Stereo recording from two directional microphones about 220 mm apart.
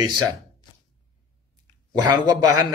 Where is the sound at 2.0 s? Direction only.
20° right (ahead or behind).